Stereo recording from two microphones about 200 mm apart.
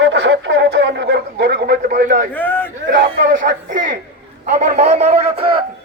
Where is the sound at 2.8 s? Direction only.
55° right (ahead or behind).